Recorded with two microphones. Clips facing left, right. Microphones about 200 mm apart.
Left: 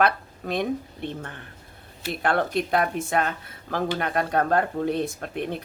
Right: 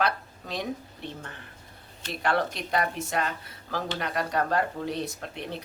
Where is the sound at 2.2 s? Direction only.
55° left (ahead or behind).